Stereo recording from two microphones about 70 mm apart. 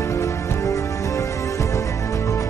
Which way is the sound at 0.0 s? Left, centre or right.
Left.